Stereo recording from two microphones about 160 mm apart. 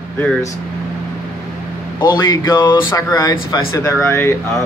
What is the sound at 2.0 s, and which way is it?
Speech, 25° left (ahead or behind).